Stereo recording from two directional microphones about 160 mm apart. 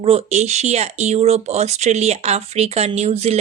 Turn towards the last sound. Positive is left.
turn(degrees=-40)  # may be behind; listen again after turning